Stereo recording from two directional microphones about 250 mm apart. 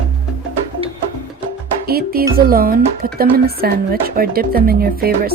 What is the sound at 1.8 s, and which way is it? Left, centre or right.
Music, right.